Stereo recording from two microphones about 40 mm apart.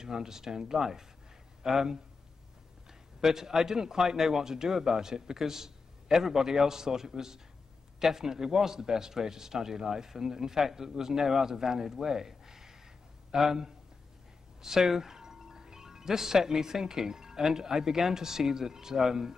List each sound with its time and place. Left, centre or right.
0.0 s a man's voice: centre
3.2 s a man's voice: centre